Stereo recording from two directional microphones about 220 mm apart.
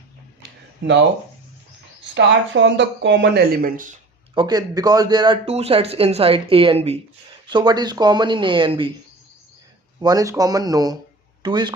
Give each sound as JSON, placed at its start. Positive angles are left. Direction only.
{"t": 2.1, "sound": "speech", "side_deg": -55}
{"t": 4.4, "sound": "speech", "side_deg": -20}
{"t": 10.0, "sound": "speech", "side_deg": -15}